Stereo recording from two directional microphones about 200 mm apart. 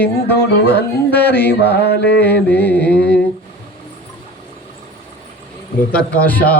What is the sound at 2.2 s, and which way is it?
Speech, 10° left (ahead or behind).